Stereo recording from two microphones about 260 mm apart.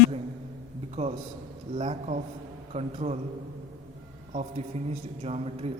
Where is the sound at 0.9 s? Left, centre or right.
Right.